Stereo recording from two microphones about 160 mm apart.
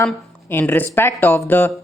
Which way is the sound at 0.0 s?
15° left (ahead or behind).